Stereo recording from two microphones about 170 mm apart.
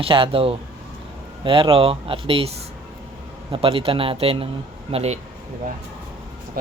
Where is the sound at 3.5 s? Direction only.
30° right (ahead or behind).